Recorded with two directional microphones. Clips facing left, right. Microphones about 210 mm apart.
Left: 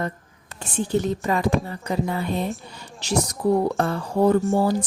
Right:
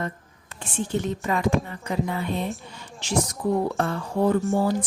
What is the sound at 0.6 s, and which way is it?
A woman's voice, 40° left (ahead or behind).